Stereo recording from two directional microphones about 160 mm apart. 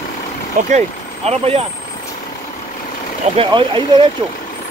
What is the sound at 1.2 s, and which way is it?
Speech, 40° right (ahead or behind).